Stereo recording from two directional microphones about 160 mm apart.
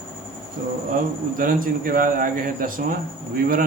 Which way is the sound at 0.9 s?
60° right (ahead or behind).